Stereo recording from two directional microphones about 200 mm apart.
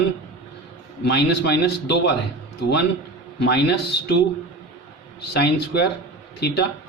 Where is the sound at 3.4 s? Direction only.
55° left (ahead or behind).